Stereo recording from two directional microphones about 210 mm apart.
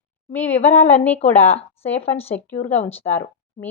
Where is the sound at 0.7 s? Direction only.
30° left (ahead or behind).